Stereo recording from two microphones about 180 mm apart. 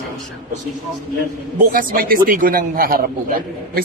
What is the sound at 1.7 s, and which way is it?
A man's voice, 55° right (ahead or behind).